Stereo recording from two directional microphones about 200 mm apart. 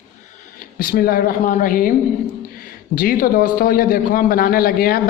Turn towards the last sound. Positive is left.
turn(degrees=45)  # may be behind; listen again after turning